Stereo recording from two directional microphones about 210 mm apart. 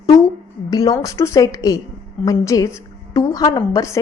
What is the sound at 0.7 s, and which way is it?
A woman's voice, 15° left (ahead or behind).